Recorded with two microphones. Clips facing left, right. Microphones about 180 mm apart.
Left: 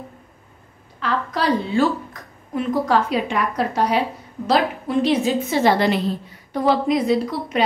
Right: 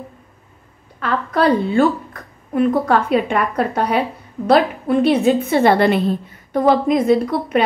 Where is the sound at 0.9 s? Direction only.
55° right (ahead or behind).